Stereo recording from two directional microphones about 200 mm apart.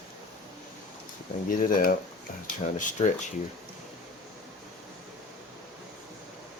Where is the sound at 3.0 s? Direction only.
35° left (ahead or behind).